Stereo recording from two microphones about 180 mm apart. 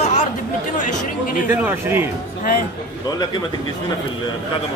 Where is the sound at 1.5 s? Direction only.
10° right (ahead or behind).